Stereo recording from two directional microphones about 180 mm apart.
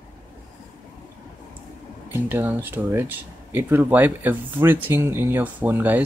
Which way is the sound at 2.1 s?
10° right (ahead or behind).